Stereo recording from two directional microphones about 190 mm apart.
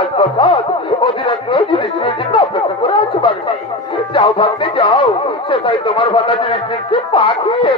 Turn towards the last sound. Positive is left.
turn(degrees=25)  # may be behind; listen again after turning